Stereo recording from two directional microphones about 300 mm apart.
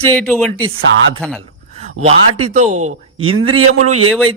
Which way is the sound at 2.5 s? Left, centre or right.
Right.